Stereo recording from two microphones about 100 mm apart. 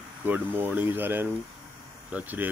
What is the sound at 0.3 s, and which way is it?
Speech, 20° right (ahead or behind).